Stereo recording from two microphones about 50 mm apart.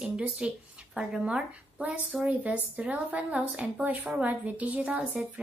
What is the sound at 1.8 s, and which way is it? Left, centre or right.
A woman's voice, right.